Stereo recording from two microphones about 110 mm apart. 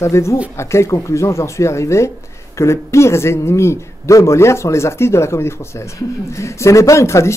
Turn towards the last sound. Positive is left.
turn(degrees=25)  # may be behind; listen again after turning